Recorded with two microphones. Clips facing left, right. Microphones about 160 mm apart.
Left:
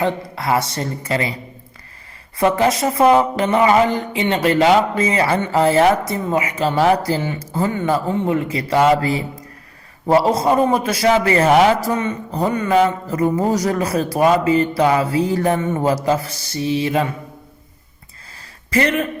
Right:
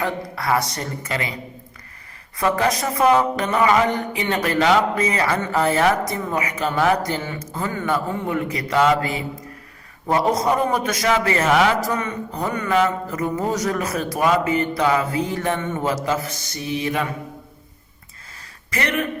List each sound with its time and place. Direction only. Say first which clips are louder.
0.0 s mantra: left 4 dB; 25° left (ahead or behind)
2.4 s mantra: left 4 dB; 25° left (ahead or behind)
10.1 s a man's voice: left 4 dB; 30° left (ahead or behind)
18.7 s a man's voice: left 6 dB; 30° left (ahead or behind)